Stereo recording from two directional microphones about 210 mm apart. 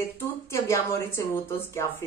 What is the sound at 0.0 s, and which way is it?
Speech, 15° left (ahead or behind).